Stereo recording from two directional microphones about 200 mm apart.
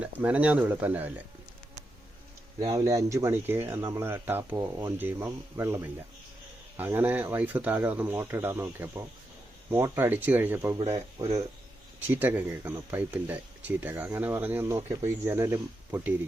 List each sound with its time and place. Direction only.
0.0 s speech: 5° right (ahead or behind)
2.6 s speech: 15° right (ahead or behind)
10.8 s speech: 25° right (ahead or behind)